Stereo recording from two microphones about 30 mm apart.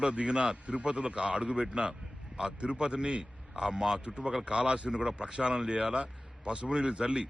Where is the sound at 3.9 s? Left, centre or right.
Right.